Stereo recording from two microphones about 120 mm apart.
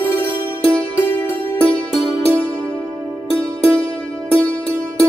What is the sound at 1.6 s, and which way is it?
Music, 5° left (ahead or behind).